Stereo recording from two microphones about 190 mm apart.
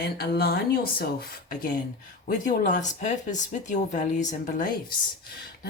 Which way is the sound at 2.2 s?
45° left (ahead or behind).